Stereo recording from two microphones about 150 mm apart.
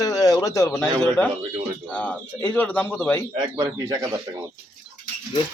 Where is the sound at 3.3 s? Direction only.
25° right (ahead or behind).